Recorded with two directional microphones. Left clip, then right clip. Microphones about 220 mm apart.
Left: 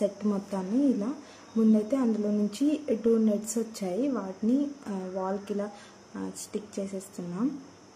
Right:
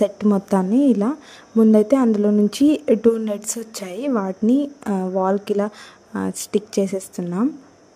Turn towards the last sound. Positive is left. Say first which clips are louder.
# right 12 dB
turn(degrees=-40)  # may be behind; listen again after turning